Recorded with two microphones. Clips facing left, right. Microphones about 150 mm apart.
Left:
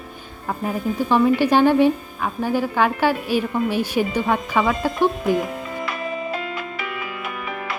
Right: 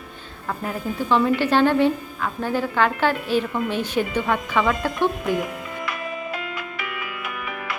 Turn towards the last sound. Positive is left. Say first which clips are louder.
# left 2 dB
turn(degrees=30)  # may be behind; listen again after turning